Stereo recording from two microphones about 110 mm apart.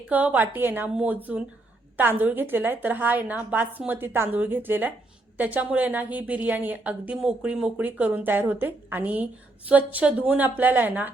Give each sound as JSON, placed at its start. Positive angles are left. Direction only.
{"t": 0.1, "sound": "a woman's voice", "side_deg": -15}